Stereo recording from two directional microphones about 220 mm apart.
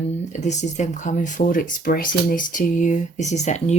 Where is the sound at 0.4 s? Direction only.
30° left (ahead or behind).